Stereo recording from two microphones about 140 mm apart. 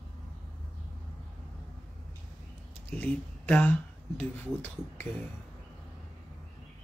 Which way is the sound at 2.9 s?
10° left (ahead or behind).